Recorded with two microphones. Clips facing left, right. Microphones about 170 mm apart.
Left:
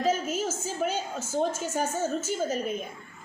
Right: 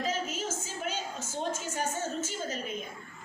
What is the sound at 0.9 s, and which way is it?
A woman's voice, 45° left (ahead or behind).